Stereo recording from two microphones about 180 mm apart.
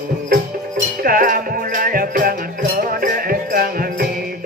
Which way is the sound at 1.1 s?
50° right (ahead or behind).